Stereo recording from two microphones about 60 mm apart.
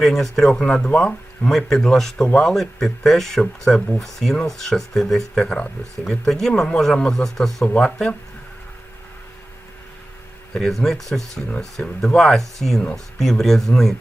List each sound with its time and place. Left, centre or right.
0.0 s speech: centre
10.5 s speech: centre